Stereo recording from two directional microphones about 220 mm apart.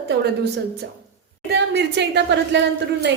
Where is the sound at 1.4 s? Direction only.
50° right (ahead or behind).